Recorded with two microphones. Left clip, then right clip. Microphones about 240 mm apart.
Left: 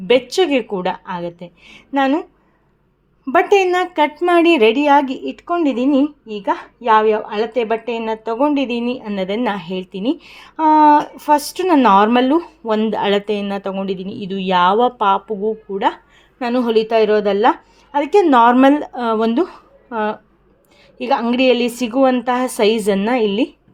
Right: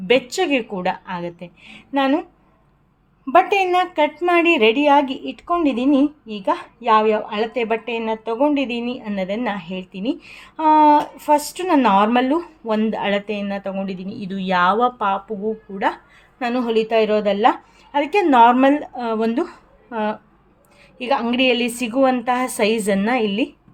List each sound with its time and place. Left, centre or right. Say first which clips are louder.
0.1 s a woman's voice: left 3 dB; centre
3.2 s a woman's voice: left 2 dB; left